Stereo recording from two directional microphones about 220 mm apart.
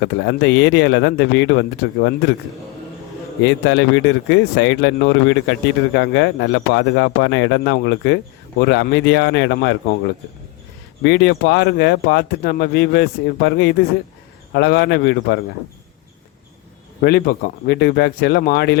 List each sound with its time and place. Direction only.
0.0 s speech: 55° left (ahead or behind)
3.4 s speech: 55° left (ahead or behind)
11.0 s speech: 55° left (ahead or behind)
17.0 s speech: 45° left (ahead or behind)